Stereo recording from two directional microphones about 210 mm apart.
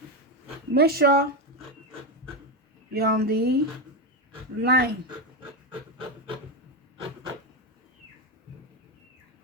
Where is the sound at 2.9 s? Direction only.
45° right (ahead or behind).